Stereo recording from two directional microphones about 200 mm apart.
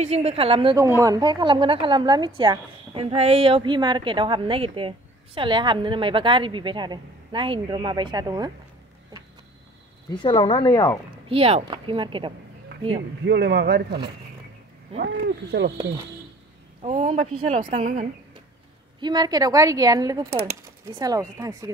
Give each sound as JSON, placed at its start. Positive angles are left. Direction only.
{"t": 0.0, "sound": "a woman's voice", "side_deg": -30}
{"t": 10.0, "sound": "speech", "side_deg": 25}
{"t": 11.2, "sound": "a woman's voice", "side_deg": -30}
{"t": 13.2, "sound": "speech", "side_deg": -55}
{"t": 16.8, "sound": "a woman's voice", "side_deg": -35}
{"t": 18.9, "sound": "a woman's voice", "side_deg": -20}